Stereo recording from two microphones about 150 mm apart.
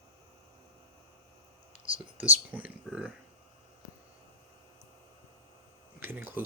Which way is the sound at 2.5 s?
10° right (ahead or behind).